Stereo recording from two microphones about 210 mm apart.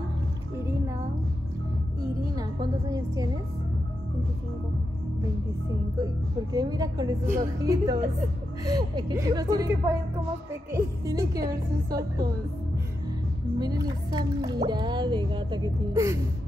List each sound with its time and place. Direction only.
0.6 s music: 10° right (ahead or behind)
2.3 s music: 20° right (ahead or behind)
6.5 s speech: 20° right (ahead or behind)
13.6 s speech: 20° right (ahead or behind)